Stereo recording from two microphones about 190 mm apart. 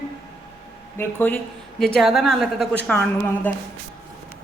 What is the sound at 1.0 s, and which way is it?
Speech, 10° left (ahead or behind).